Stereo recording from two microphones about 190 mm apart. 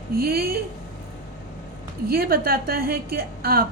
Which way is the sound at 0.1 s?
55° right (ahead or behind).